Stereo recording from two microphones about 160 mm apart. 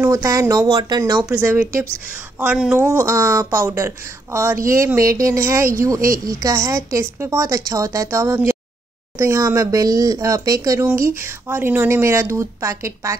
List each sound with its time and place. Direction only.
0.0 s a woman's voice: 20° right (ahead or behind)
1.3 s a woman's voice: 10° right (ahead or behind)
5.9 s a woman's voice: 60° right (ahead or behind)
6.2 s a woman's voice: 20° right (ahead or behind)